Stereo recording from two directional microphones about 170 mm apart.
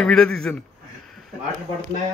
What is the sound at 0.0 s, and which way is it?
Speech, 5° left (ahead or behind).